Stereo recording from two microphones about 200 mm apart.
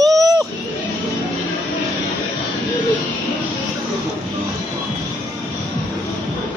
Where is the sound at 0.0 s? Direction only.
15° right (ahead or behind).